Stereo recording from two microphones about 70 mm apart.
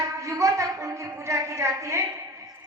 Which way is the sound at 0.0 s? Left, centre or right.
Right.